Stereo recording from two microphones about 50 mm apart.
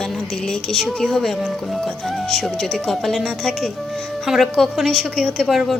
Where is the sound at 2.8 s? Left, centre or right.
Centre.